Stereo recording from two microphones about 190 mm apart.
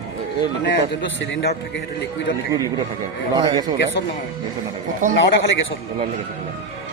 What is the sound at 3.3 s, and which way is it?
Speech, 20° right (ahead or behind).